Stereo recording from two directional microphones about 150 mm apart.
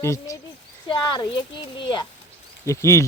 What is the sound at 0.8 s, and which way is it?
Speech, 30° left (ahead or behind).